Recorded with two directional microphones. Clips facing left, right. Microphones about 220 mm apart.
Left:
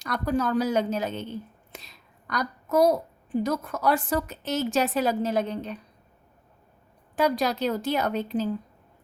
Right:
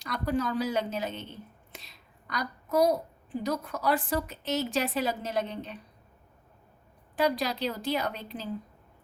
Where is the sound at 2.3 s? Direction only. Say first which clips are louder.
Left 4 dB; 50° left (ahead or behind).